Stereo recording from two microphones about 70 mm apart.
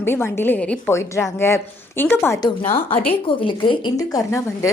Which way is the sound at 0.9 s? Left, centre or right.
Left.